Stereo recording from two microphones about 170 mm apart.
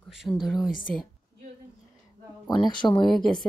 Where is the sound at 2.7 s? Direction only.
25° left (ahead or behind).